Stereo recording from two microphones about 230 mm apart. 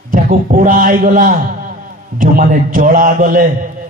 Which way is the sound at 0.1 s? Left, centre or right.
Right.